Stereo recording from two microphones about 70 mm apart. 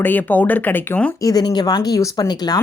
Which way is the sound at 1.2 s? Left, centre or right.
Left.